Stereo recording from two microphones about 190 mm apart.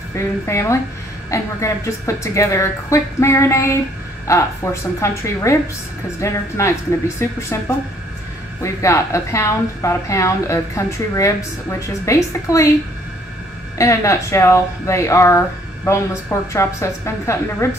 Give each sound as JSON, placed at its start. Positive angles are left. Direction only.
{"t": 0.1, "sound": "speech", "side_deg": 15}
{"t": 13.7, "sound": "speech", "side_deg": 15}